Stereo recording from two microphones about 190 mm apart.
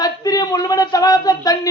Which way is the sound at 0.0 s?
20° left (ahead or behind).